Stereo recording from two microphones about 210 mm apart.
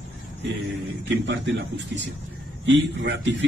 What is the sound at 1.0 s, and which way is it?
Speech, 60° right (ahead or behind).